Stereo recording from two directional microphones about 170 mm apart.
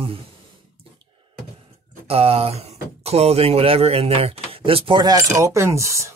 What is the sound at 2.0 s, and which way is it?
Speech, 35° right (ahead or behind).